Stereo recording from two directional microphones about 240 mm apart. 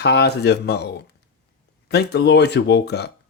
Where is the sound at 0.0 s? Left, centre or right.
Left.